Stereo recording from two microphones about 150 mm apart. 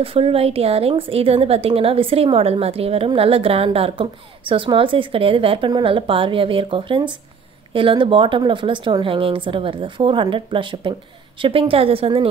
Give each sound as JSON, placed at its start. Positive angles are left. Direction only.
{"t": 0.0, "sound": "a woman's voice", "side_deg": -40}